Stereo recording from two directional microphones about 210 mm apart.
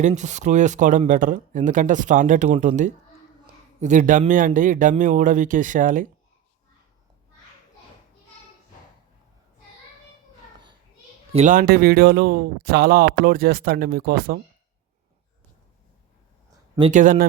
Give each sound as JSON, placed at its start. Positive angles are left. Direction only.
{"t": 0.0, "sound": "speech", "side_deg": -35}
{"t": 11.3, "sound": "speech", "side_deg": -35}
{"t": 16.9, "sound": "speech", "side_deg": -40}